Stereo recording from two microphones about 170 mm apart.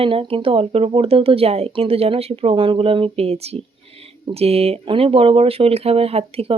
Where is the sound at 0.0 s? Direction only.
35° right (ahead or behind).